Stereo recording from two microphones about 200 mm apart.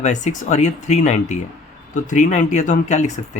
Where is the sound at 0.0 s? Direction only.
35° left (ahead or behind).